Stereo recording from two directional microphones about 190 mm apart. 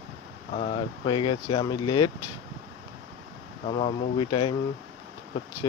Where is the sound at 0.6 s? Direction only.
30° left (ahead or behind).